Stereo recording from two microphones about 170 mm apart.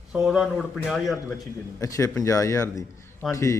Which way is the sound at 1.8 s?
20° left (ahead or behind).